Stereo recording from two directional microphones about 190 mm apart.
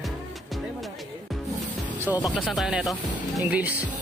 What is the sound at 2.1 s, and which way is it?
Speech, 10° right (ahead or behind).